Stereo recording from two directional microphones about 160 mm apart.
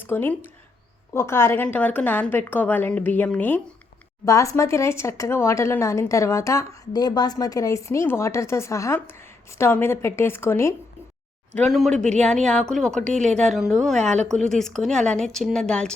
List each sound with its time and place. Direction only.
0.0 s speech: 10° left (ahead or behind)
11.5 s speech: centre (ahead or behind)
14.0 s speech: 45° right (ahead or behind)
14.3 s speech: centre (ahead or behind)